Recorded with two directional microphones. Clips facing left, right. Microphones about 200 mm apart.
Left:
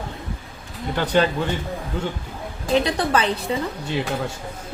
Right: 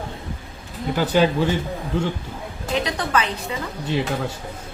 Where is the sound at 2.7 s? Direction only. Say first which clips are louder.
Left 3 dB; 35° left (ahead or behind).